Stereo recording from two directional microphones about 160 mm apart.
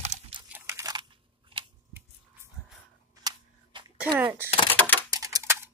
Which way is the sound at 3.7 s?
30° right (ahead or behind).